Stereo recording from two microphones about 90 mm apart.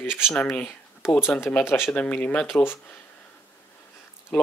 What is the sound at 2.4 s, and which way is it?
Speech, 25° left (ahead or behind).